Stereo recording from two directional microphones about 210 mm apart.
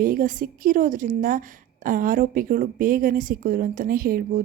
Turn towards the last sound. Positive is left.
turn(degrees=-45)  # may be behind; listen again after turning